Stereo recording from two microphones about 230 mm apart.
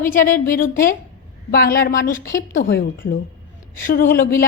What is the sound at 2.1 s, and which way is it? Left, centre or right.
Speech, centre.